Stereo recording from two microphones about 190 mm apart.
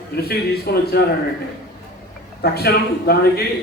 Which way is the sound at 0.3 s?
55° left (ahead or behind).